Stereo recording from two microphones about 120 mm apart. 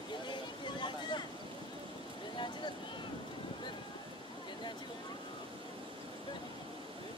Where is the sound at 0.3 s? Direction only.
40° left (ahead or behind).